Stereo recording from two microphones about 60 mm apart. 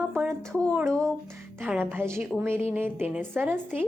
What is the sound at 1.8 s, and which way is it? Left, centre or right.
Speech, right.